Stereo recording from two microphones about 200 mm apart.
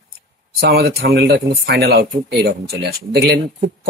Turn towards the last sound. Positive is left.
turn(degrees=-55)  # may be behind; listen again after turning